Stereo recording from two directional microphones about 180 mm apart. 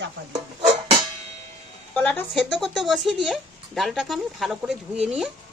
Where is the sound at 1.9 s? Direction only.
5° left (ahead or behind).